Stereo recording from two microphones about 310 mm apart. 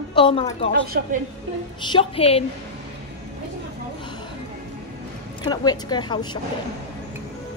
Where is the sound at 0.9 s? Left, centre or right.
Right.